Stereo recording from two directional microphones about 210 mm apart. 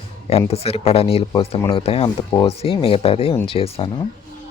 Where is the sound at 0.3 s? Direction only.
30° left (ahead or behind).